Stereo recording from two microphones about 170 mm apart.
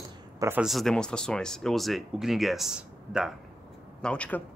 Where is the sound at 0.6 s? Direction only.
Centre (ahead or behind).